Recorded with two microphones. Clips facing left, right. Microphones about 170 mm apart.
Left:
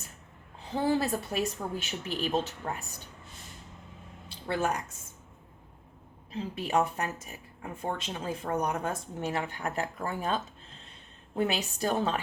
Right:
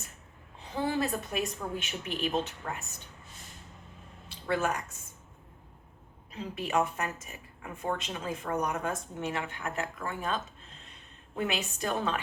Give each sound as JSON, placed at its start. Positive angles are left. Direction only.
{"t": 0.7, "sound": "speech", "side_deg": 30}
{"t": 4.4, "sound": "speech", "side_deg": 35}
{"t": 6.3, "sound": "speech", "side_deg": 35}